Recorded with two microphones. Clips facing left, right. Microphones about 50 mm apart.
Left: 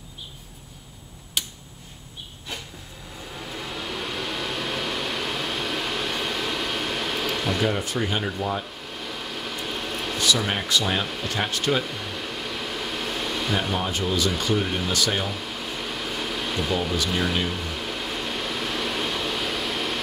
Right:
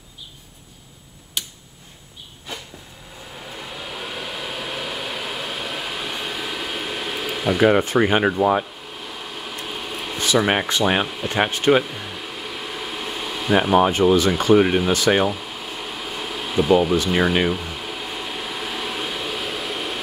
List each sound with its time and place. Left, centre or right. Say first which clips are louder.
1.4 s tick-tock: even; centre
3.4 s a sound: left 1 dB; centre
7.7 s speech: right 9 dB; right
8.9 s vehicle: left 1 dB; centre
10.1 s air conditioning: right 6 dB; right
10.7 s speech: right 4 dB; right
11.8 s air conditioning: even; centre
14.4 s speech: right 9 dB; centre
15.2 s a sound: right 5 dB; centre
17.0 s air conditioning: right 6 dB; centre